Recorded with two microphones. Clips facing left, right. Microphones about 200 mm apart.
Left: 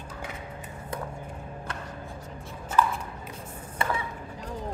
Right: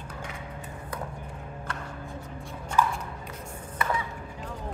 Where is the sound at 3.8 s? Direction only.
30° left (ahead or behind).